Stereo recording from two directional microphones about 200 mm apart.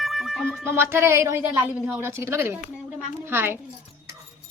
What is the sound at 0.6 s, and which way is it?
Speech, 10° right (ahead or behind).